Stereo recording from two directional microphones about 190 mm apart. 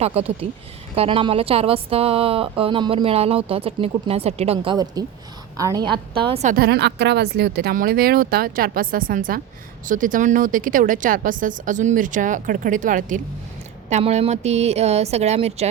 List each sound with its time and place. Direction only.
0.0 s speech: 30° right (ahead or behind)
6.2 s speech: 30° right (ahead or behind)
6.5 s a woman's voice: 55° right (ahead or behind); by 15.7 s 35° right (ahead or behind)